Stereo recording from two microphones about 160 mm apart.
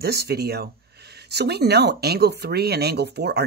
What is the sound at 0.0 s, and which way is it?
Speech, 85° right.